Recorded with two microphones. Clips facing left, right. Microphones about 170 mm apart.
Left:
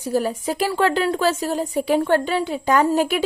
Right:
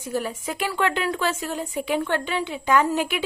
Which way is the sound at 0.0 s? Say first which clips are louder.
Left 6 dB; 35° left (ahead or behind).